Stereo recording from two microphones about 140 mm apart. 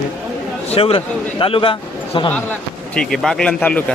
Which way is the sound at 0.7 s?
40° left (ahead or behind).